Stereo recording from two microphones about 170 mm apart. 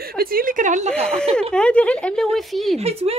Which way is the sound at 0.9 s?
5° left (ahead or behind).